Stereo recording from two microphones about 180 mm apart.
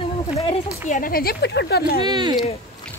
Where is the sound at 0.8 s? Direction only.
50° left (ahead or behind).